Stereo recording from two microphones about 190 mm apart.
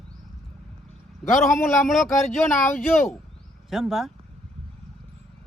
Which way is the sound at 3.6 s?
Centre (ahead or behind).